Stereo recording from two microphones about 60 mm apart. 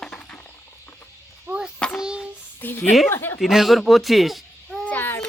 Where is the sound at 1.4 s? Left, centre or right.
Centre.